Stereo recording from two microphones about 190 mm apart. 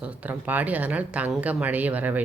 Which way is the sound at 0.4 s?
10° right (ahead or behind).